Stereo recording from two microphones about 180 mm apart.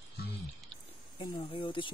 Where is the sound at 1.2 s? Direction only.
30° left (ahead or behind).